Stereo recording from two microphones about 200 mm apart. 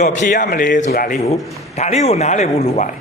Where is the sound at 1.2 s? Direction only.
30° left (ahead or behind).